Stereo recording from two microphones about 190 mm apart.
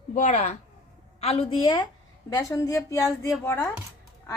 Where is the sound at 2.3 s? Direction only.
15° left (ahead or behind).